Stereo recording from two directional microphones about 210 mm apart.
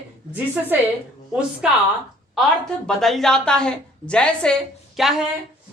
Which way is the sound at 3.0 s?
Centre (ahead or behind).